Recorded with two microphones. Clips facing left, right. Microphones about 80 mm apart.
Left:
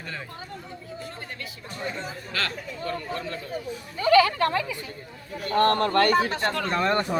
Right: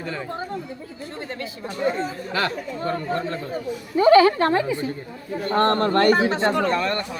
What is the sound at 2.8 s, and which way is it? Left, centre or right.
A woman's voice, right.